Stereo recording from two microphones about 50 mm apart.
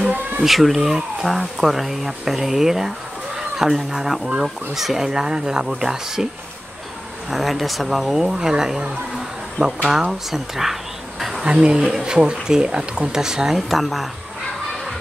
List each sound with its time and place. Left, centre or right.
0.0 s a sound: right
0.4 s speech: centre
7.2 s speech: centre
10.3 s insect: centre
11.4 s speech: centre
13.7 s speech: centre